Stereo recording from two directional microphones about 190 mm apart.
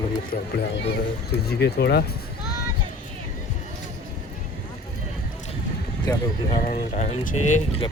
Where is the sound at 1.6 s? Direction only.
60° left (ahead or behind).